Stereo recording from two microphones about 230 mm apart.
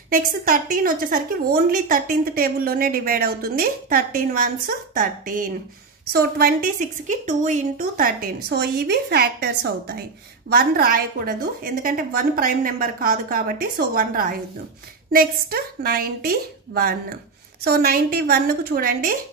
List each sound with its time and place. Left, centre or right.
0.1 s a woman's voice: right